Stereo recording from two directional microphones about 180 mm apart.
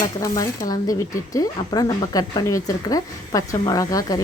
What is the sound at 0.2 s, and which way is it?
A woman's voice, 20° left (ahead or behind).